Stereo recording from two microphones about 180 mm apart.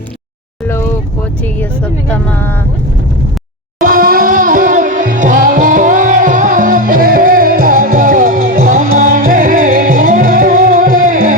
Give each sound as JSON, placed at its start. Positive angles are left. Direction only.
{"t": 1.5, "sound": "speech", "side_deg": 10}
{"t": 3.8, "sound": "music", "side_deg": -50}